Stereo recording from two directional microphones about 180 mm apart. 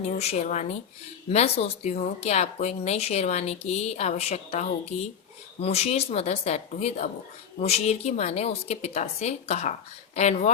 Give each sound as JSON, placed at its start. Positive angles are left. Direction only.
{"t": 0.2, "sound": "speech", "side_deg": 40}